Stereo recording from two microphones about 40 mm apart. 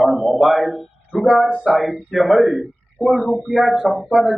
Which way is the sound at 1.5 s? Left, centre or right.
Right.